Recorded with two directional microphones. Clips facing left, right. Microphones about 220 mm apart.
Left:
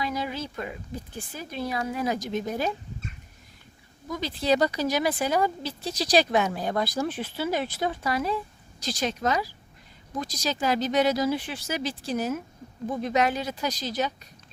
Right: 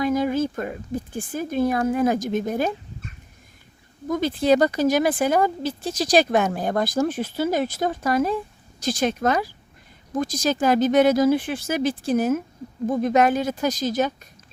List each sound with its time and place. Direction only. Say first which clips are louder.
0.0 s speech: right 10 dB; 50° right (ahead or behind)
4.1 s speech: right 6 dB; 50° right (ahead or behind)